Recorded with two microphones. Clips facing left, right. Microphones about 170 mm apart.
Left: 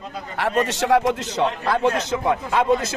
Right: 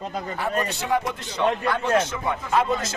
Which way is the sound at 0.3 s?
90° left.